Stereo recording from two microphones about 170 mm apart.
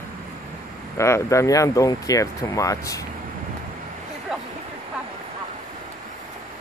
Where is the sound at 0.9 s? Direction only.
15° left (ahead or behind).